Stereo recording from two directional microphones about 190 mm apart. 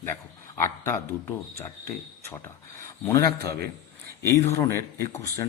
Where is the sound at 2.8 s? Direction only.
15° left (ahead or behind).